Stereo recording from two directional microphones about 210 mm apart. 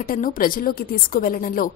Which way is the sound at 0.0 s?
40° left (ahead or behind).